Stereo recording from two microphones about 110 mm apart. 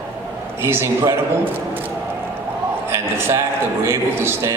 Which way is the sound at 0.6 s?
20° right (ahead or behind).